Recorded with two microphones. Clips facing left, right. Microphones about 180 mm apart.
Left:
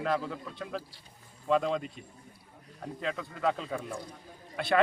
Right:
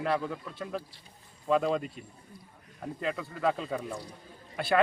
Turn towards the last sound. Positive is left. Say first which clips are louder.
# right 1 dB
turn(degrees=0)  # may be behind; listen again after turning